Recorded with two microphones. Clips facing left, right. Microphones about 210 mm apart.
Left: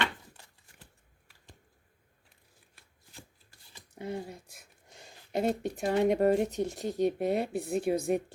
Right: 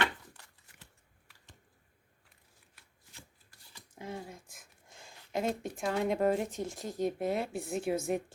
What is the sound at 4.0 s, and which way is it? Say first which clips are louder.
Speech: left 5 dB; 65° left (ahead or behind).